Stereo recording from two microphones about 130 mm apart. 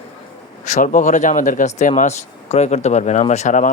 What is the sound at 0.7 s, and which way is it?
Speech, 70° left (ahead or behind).